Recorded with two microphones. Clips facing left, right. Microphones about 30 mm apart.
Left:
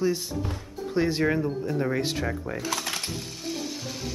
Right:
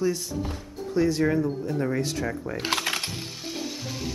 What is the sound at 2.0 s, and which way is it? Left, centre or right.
Speech, left.